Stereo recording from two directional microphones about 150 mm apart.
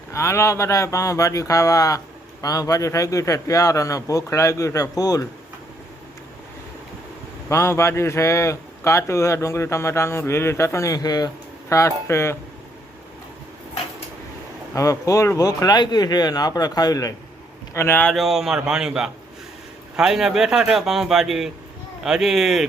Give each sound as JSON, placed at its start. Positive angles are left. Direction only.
{"t": 0.1, "sound": "a man's voice", "side_deg": 20}
{"t": 7.5, "sound": "a man's voice", "side_deg": 20}
{"t": 14.8, "sound": "a man's voice", "side_deg": 20}
{"t": 17.7, "sound": "speech", "side_deg": 15}
{"t": 18.1, "sound": "speech", "side_deg": 0}